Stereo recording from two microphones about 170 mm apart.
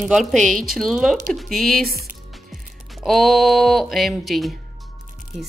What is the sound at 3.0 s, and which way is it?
Speech, centre (ahead or behind).